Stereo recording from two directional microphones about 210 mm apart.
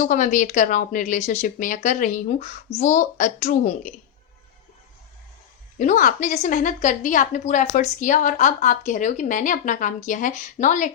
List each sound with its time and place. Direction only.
0.0 s a woman's voice: 40° left (ahead or behind)
5.8 s a woman's voice: 35° left (ahead or behind)